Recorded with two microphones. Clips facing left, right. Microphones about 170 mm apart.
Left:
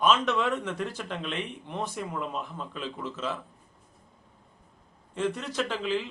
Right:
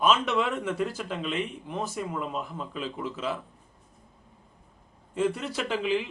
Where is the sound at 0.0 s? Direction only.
10° right (ahead or behind).